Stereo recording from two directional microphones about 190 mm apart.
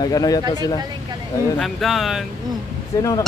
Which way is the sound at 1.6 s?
Centre (ahead or behind).